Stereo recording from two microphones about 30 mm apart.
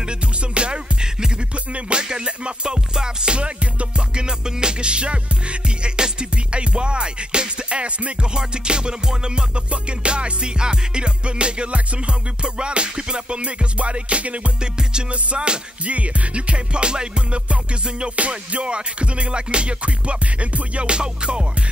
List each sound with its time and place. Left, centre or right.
0.6 s music: right
8.4 s music: right
14.6 s music: right
15.8 s music: right
18.0 s music: right
18.6 s music: right
20.9 s music: right